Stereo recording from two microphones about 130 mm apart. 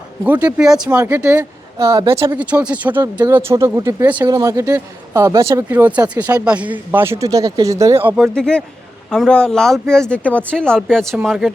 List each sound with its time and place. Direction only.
0.3 s a man's voice: 10° right (ahead or behind)
2.3 s speech: 10° right (ahead or behind)
4.0 s speech: 10° right (ahead or behind)
4.3 s a man's voice: 25° right (ahead or behind)
8.1 s speech: centre (ahead or behind)